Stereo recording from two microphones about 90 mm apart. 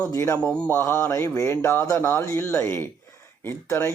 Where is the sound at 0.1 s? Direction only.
30° left (ahead or behind).